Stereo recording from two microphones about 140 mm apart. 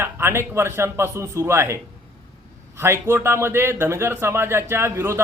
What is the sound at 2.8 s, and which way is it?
A man's voice, 20° right (ahead or behind).